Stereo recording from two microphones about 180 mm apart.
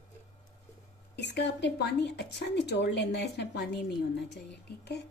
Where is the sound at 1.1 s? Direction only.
70° left (ahead or behind).